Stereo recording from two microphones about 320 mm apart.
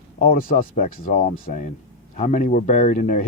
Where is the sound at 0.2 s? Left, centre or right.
Left.